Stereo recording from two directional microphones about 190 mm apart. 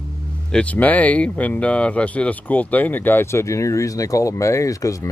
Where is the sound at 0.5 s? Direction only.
5° left (ahead or behind).